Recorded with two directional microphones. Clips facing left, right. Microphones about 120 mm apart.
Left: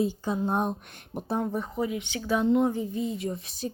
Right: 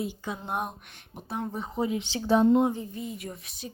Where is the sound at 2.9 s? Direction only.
25° left (ahead or behind).